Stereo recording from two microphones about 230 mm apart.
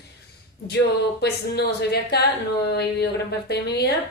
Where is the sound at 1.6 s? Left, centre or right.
Left.